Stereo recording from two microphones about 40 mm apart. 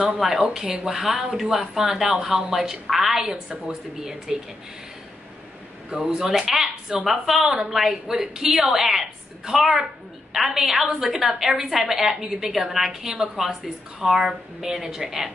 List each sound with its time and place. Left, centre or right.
0.2 s a woman's voice: centre
5.9 s a woman's voice: centre